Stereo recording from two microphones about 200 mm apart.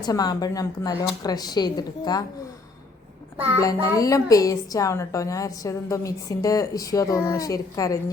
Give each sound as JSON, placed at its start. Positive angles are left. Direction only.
{"t": 0.0, "sound": "speech", "side_deg": 20}
{"t": 3.6, "sound": "a woman's voice", "side_deg": 15}